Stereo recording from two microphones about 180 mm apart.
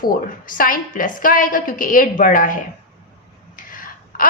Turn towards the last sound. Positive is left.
turn(degrees=50)  # may be behind; listen again after turning